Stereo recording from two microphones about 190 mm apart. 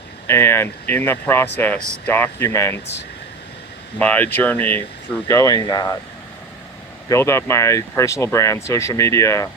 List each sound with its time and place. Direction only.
0.3 s speech: 15° left (ahead or behind)
3.9 s speech: 10° left (ahead or behind)
7.1 s speech: 15° left (ahead or behind)